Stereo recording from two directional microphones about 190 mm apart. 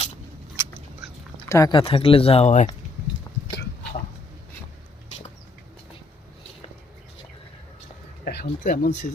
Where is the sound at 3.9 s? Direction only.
35° left (ahead or behind).